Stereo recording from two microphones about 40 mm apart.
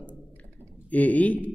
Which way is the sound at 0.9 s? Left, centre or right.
Left.